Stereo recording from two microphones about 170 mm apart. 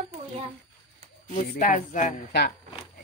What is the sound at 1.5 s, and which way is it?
Speech, 50° left (ahead or behind).